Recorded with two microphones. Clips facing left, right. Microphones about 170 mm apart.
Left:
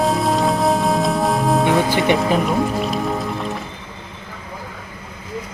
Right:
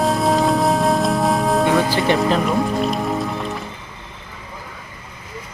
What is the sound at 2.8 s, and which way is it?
Music, centre (ahead or behind).